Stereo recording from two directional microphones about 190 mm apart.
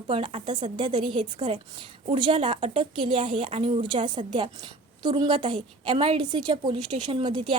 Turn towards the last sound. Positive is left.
turn(degrees=-25)  # may be behind; listen again after turning